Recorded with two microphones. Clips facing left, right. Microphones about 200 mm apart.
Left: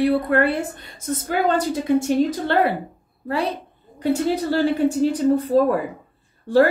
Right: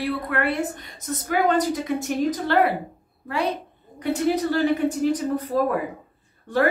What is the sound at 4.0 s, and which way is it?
A woman's voice, 30° left (ahead or behind).